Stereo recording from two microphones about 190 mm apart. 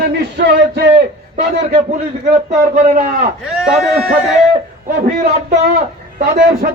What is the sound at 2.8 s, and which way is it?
Speech, 45° right (ahead or behind).